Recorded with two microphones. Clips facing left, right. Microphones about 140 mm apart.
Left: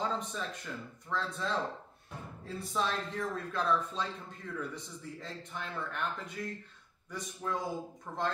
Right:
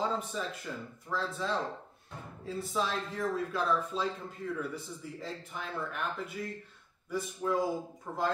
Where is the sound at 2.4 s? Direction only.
Centre (ahead or behind).